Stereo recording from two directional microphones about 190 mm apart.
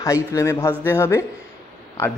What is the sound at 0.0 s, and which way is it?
Speech, 15° left (ahead or behind).